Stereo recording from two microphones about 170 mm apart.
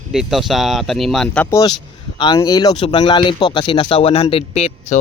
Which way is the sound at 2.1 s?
25° left (ahead or behind).